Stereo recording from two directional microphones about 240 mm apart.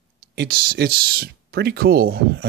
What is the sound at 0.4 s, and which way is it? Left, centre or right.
Speech, right.